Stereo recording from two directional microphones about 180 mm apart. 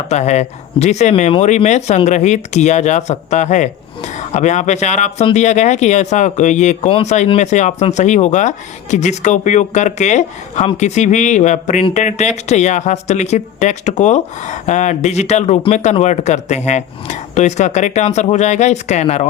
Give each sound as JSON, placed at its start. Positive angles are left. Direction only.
{"t": 0.1, "sound": "speech", "side_deg": 40}